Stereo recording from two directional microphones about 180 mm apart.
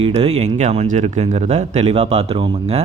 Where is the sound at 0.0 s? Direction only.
35° right (ahead or behind).